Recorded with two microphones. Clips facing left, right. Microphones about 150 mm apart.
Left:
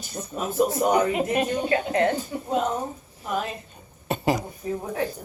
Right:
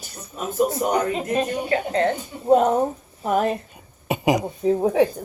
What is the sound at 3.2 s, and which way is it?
Speech, 60° right (ahead or behind).